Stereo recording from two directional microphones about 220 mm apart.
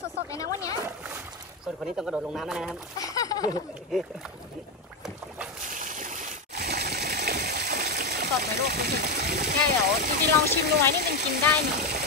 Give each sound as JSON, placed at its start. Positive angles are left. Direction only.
{"t": 0.3, "sound": "speech", "side_deg": 15}
{"t": 2.0, "sound": "speech", "side_deg": -5}
{"t": 3.0, "sound": "a sound", "side_deg": 15}
{"t": 5.6, "sound": "a sound", "side_deg": -35}
{"t": 6.5, "sound": "water", "side_deg": -50}
{"t": 10.2, "sound": "speech", "side_deg": -50}